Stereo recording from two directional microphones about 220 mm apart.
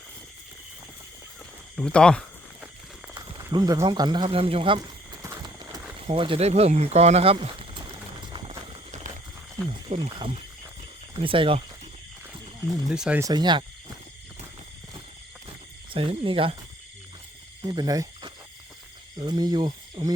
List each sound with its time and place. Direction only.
1.7 s a sound: 5° left (ahead or behind)
3.2 s speech: 20° right (ahead or behind)
5.2 s clip-clop: 15° right (ahead or behind)
6.0 s a sound: 25° right (ahead or behind)
9.6 s speech: 25° right (ahead or behind)
12.9 s speech: 5° right (ahead or behind)
15.9 s speech: 25° right (ahead or behind)
17.6 s speech: 20° right (ahead or behind)